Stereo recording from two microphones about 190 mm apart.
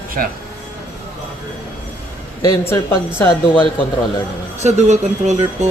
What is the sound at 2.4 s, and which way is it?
Speech, 15° left (ahead or behind).